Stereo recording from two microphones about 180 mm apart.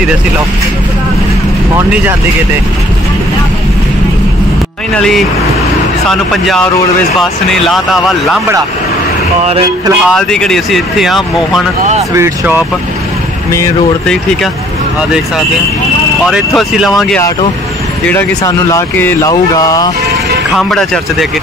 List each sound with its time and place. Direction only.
4.9 s speech: 5° left (ahead or behind)
9.5 s a sound: 25° right (ahead or behind)
10.0 s speech: 5° left (ahead or behind)
12.1 s speech: 10° right (ahead or behind)
16.3 s speech: 5° right (ahead or behind)
18.0 s speech: 15° left (ahead or behind)
20.5 s speech: centre (ahead or behind)